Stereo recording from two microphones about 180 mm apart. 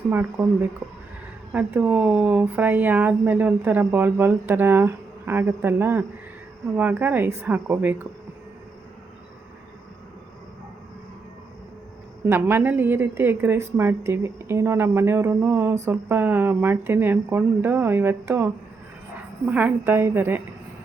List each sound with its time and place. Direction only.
0.1 s speech: 15° right (ahead or behind)
1.5 s speech: 10° right (ahead or behind)
12.2 s speech: 10° right (ahead or behind)
19.5 s speech: 10° right (ahead or behind)